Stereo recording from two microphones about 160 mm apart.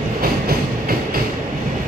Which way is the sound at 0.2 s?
65° right (ahead or behind).